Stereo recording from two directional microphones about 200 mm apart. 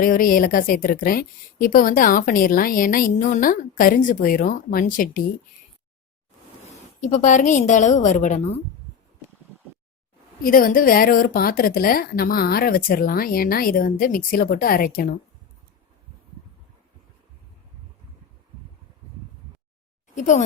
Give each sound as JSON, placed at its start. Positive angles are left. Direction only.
{"t": 0.0, "sound": "speech", "side_deg": 45}
{"t": 7.0, "sound": "a woman's voice", "side_deg": 40}
{"t": 10.4, "sound": "speech", "side_deg": 45}
{"t": 20.1, "sound": "a woman's voice", "side_deg": 40}